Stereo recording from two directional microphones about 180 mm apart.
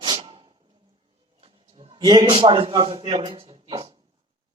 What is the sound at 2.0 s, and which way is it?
A man's voice, 20° right (ahead or behind).